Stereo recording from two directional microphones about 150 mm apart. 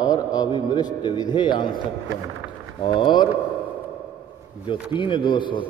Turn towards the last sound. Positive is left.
turn(degrees=35)  # may be behind; listen again after turning